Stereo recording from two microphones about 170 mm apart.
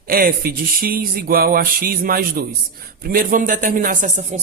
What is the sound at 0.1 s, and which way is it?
A man's voice, 60° right (ahead or behind).